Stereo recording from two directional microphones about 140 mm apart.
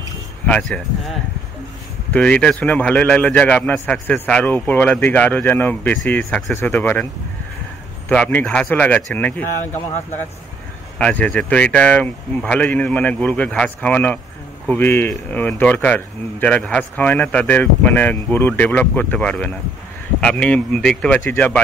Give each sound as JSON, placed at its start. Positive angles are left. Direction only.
{"t": 0.5, "sound": "speech", "side_deg": 5}
{"t": 2.1, "sound": "speech", "side_deg": 5}
{"t": 8.1, "sound": "speech", "side_deg": 10}
{"t": 11.0, "sound": "speech", "side_deg": 10}